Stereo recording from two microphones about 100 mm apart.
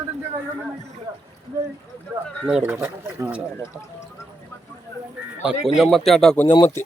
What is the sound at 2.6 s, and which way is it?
Speech, 20° right (ahead or behind).